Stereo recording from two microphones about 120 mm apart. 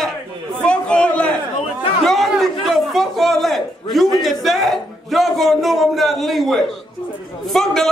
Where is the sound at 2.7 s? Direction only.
Centre (ahead or behind).